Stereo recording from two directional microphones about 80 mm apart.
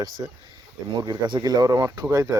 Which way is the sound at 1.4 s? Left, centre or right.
Right.